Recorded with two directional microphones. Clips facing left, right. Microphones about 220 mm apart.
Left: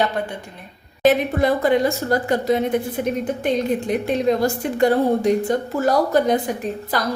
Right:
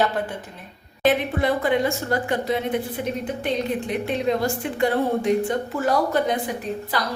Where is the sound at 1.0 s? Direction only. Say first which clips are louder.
Left 4 dB; 40° left (ahead or behind).